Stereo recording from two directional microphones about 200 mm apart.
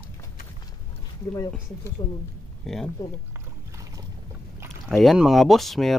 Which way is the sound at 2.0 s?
25° left (ahead or behind).